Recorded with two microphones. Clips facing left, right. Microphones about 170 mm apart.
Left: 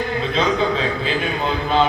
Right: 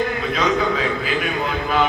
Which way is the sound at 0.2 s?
25° left (ahead or behind).